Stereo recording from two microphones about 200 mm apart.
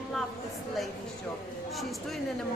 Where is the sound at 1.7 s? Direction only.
Centre (ahead or behind).